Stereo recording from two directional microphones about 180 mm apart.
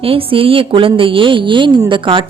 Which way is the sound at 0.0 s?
30° right (ahead or behind).